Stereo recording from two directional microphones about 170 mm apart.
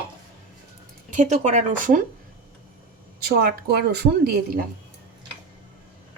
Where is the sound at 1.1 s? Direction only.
45° right (ahead or behind).